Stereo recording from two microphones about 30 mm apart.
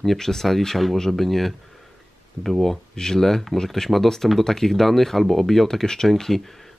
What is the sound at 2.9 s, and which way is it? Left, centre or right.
Speech, centre.